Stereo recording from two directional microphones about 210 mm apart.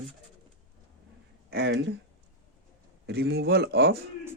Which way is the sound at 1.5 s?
50° right (ahead or behind).